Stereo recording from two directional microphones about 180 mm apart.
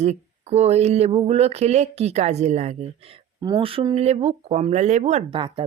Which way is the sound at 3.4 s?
25° right (ahead or behind).